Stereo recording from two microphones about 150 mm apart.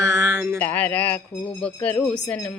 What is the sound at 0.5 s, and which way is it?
A woman's voice, 10° left (ahead or behind).